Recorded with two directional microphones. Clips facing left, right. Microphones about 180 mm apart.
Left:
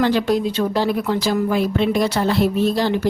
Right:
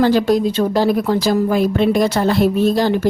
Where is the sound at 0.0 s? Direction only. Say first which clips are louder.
Right 4 dB; 40° right (ahead or behind).